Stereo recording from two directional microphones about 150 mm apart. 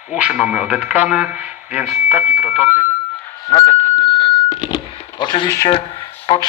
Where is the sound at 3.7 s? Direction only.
15° left (ahead or behind).